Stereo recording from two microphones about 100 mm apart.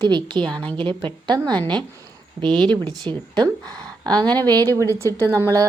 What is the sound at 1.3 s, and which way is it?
A woman's voice, 40° right (ahead or behind).